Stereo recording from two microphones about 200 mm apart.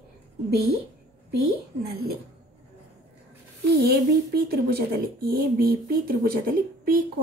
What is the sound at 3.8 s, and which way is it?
Speech, 50° right (ahead or behind).